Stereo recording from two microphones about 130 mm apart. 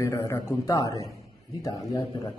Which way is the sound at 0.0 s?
25° left (ahead or behind).